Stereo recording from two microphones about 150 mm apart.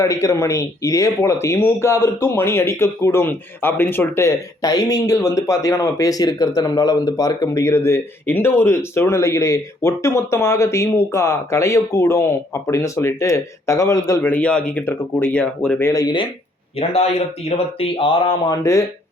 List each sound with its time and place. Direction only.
0.0 s speech: 20° left (ahead or behind)
15.9 s speech: 25° left (ahead or behind)
16.7 s a man's voice: 45° left (ahead or behind)
17.7 s a sound: 35° left (ahead or behind)